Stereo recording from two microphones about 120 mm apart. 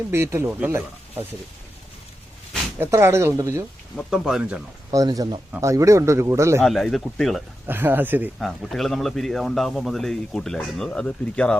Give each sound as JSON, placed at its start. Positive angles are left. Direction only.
{"t": 0.1, "sound": "speech", "side_deg": -20}
{"t": 2.7, "sound": "speech", "side_deg": -20}
{"t": 4.1, "sound": "speech", "side_deg": -5}
{"t": 4.9, "sound": "speech", "side_deg": -30}
{"t": 6.6, "sound": "speech", "side_deg": 0}
{"t": 7.7, "sound": "speech", "side_deg": -15}
{"t": 8.4, "sound": "speech", "side_deg": 0}